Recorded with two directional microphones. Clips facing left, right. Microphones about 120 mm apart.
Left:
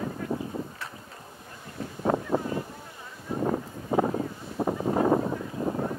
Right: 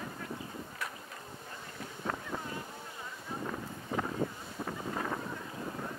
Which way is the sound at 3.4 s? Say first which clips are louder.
Left 13 dB; 40° left (ahead or behind).